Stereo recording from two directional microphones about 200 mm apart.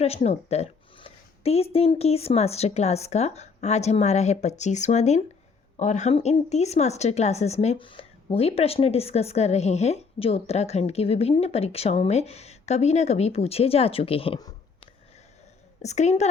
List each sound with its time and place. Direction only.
0.0 s a woman's voice: 30° left (ahead or behind)
15.8 s a woman's voice: 35° left (ahead or behind)